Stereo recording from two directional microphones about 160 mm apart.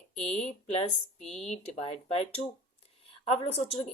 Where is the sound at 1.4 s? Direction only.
40° left (ahead or behind).